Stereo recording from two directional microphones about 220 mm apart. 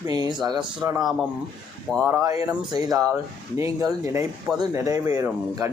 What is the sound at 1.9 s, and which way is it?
Speech, centre (ahead or behind).